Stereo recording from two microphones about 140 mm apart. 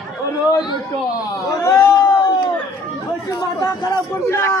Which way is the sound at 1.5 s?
20° left (ahead or behind).